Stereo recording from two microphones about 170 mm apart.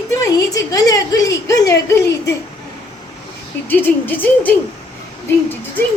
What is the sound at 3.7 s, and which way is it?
Speech, 10° left (ahead or behind).